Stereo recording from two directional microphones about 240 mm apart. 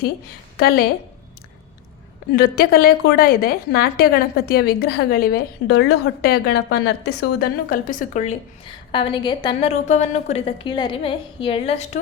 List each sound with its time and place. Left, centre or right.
2.3 s a woman's voice: left